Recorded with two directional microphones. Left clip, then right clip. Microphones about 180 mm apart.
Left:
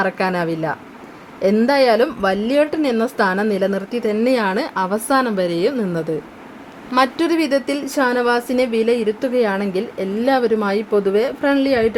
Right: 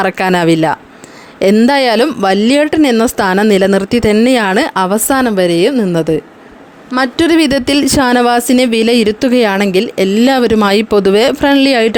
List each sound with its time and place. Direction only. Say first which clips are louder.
0.0 s speech: right 8 dB; 45° right (ahead or behind)
7.2 s speech: right 7 dB; 45° right (ahead or behind)